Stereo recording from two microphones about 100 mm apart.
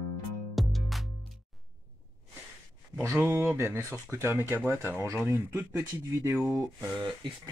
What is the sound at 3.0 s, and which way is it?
Speech, 25° right (ahead or behind).